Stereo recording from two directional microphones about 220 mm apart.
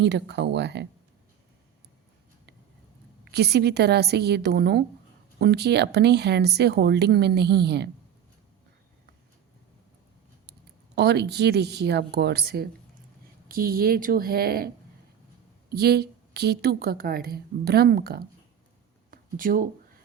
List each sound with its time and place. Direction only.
0.0 s a woman's voice: 50° right (ahead or behind)
3.3 s a woman's voice: 45° right (ahead or behind)
10.9 s a woman's voice: 50° right (ahead or behind)
15.7 s a woman's voice: 45° right (ahead or behind)
19.1 s a sound: 40° right (ahead or behind)